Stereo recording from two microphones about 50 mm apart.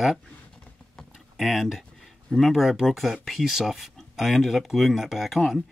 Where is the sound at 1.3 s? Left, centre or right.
Centre.